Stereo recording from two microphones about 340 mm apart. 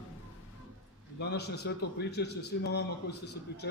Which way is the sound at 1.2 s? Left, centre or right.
Left.